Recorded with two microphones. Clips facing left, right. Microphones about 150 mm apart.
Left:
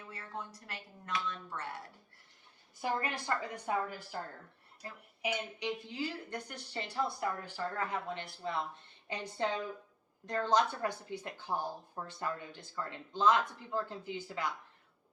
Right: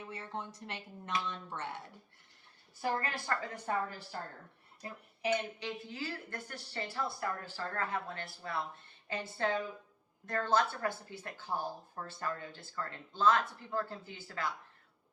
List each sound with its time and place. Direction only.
0.0 s speech: 20° right (ahead or behind)
2.8 s speech: 15° left (ahead or behind)
5.2 s speech: 15° left (ahead or behind)